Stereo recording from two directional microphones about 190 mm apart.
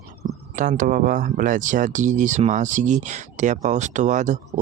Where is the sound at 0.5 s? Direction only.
45° right (ahead or behind).